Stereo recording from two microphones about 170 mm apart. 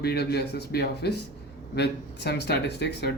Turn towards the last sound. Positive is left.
turn(degrees=80)